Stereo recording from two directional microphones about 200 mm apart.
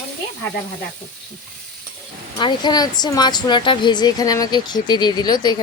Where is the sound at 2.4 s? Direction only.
20° left (ahead or behind).